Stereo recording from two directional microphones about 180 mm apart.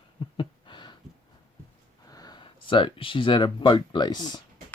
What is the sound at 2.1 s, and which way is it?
Speech, 20° left (ahead or behind).